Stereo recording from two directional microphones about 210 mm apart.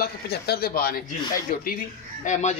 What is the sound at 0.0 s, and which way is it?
Speech, 50° left (ahead or behind).